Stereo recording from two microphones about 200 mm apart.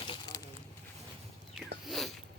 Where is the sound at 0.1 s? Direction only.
20° left (ahead or behind).